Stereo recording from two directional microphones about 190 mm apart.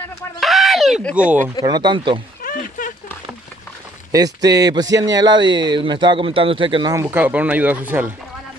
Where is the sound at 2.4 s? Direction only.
45° left (ahead or behind).